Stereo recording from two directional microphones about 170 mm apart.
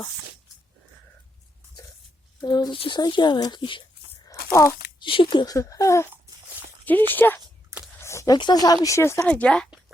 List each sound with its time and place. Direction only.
2.4 s speech: 25° left (ahead or behind)
4.9 s speech: 30° left (ahead or behind); by 9.6 s 5° left (ahead or behind)